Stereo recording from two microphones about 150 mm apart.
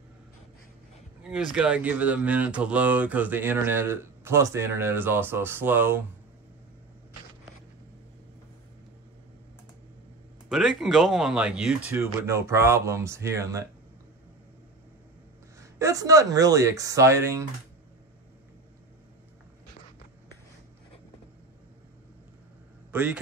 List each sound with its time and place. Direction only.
1.2 s speech: 5° right (ahead or behind)
10.5 s speech: centre (ahead or behind); by 13.7 s 20° right (ahead or behind)
15.6 s speech: 20° right (ahead or behind)
22.8 s a man's voice: 10° right (ahead or behind)